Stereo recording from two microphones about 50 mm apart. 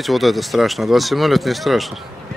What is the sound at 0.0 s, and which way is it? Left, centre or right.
Speech, centre.